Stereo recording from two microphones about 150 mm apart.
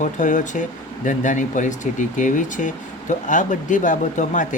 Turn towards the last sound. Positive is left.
turn(degrees=55)  # may be behind; listen again after turning